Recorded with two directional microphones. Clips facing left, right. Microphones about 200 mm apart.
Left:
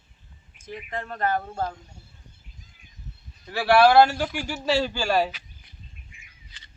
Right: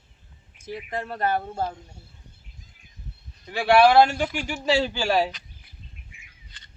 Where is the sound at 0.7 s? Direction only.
35° right (ahead or behind).